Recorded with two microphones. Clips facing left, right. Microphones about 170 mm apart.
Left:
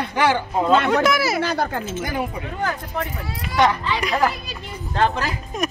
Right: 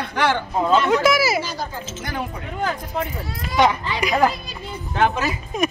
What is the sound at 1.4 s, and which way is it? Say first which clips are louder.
Speech: left 5 dB; 60° left (ahead or behind).